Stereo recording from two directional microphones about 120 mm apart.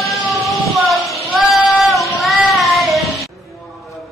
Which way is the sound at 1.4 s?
Centre (ahead or behind).